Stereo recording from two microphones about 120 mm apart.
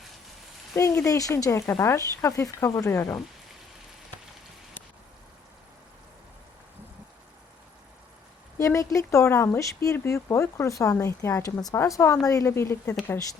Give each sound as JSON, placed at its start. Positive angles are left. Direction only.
{"t": 0.7, "sound": "speech", "side_deg": 25}
{"t": 8.5, "sound": "speech", "side_deg": 25}